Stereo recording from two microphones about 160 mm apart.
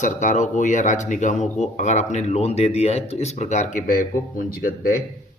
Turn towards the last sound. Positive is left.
turn(degrees=65)  # may be behind; listen again after turning